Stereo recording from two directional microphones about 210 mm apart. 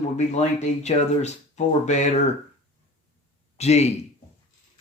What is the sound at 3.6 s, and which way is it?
Speech, 30° left (ahead or behind).